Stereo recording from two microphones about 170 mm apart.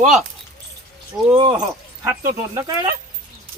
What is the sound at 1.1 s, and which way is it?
Speech, 5° right (ahead or behind).